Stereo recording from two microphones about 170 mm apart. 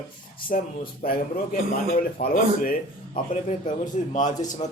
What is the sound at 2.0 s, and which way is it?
Speech, 55° left (ahead or behind).